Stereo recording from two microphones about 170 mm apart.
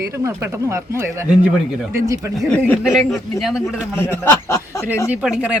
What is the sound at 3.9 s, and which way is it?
Speech, 10° left (ahead or behind).